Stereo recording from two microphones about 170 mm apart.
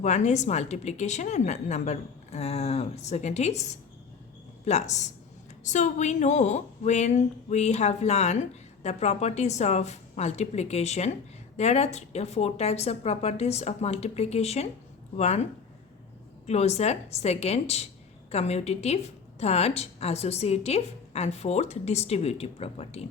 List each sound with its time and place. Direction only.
0.0 s a woman's voice: 40° left (ahead or behind)
16.5 s a woman's voice: 40° left (ahead or behind)